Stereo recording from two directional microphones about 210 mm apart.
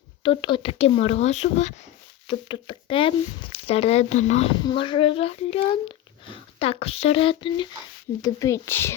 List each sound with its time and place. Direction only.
0.2 s speech: 25° left (ahead or behind)